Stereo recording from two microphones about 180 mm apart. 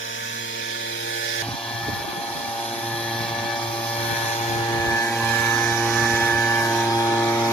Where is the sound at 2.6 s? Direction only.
10° left (ahead or behind).